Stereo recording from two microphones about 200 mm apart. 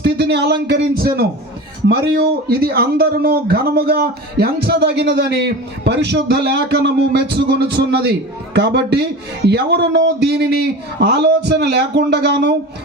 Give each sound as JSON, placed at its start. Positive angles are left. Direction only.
{"t": 0.0, "sound": "speech", "side_deg": -55}